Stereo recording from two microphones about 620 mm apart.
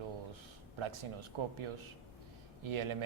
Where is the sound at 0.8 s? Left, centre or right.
Right.